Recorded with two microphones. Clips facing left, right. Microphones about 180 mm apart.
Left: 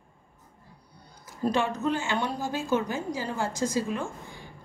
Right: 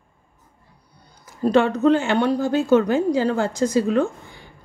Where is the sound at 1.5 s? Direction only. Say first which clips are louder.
Right 13 dB; 65° right (ahead or behind).